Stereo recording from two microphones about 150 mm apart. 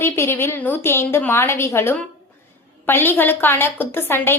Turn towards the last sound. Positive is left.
turn(degrees=15)  # may be behind; listen again after turning